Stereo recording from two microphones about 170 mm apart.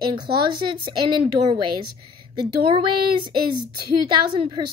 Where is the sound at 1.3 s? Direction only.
30° right (ahead or behind).